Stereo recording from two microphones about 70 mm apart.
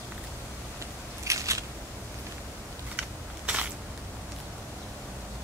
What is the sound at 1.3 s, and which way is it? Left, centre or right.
Scissors, right.